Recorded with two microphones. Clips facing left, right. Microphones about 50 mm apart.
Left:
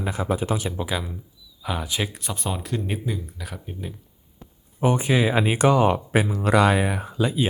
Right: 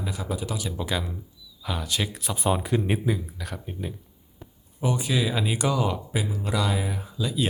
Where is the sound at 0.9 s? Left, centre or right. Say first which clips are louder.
Left 1 dB; centre.